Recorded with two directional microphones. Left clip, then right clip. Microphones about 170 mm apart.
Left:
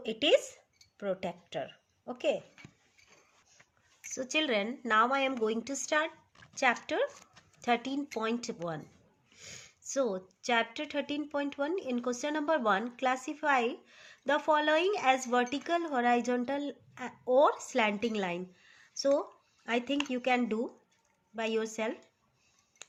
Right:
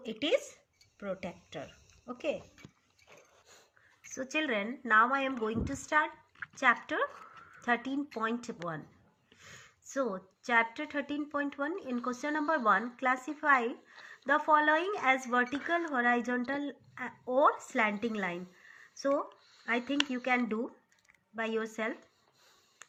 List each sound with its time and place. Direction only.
0.0 s speech: 30° left (ahead or behind)
4.1 s speech: 20° left (ahead or behind)